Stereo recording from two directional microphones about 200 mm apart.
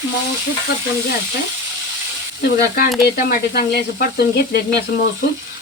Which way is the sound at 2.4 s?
50° left (ahead or behind).